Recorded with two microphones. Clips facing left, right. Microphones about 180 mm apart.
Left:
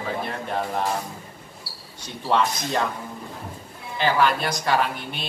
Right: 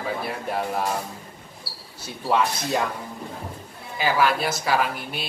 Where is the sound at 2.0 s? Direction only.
5° right (ahead or behind).